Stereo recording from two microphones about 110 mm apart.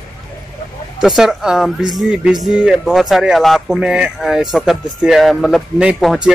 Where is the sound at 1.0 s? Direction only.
5° right (ahead or behind).